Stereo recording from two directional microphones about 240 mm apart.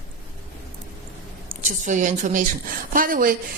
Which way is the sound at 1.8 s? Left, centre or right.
Right.